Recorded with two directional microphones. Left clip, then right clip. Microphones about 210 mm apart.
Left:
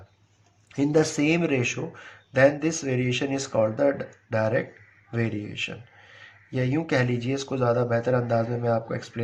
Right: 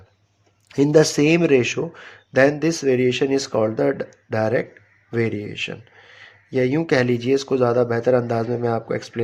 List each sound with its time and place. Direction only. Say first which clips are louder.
0.7 s speech: right 7 dB; 45° right (ahead or behind)